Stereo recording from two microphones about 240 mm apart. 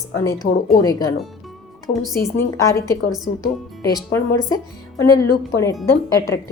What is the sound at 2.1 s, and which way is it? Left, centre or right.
Speech, centre.